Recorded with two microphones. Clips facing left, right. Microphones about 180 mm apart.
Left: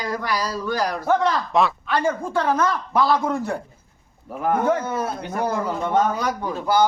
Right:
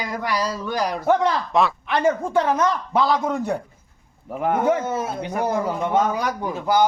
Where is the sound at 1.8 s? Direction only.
20° right (ahead or behind).